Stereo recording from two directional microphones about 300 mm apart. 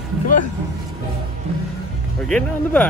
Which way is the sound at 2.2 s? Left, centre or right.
Centre.